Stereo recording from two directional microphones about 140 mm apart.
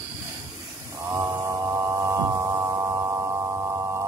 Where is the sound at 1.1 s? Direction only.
20° right (ahead or behind).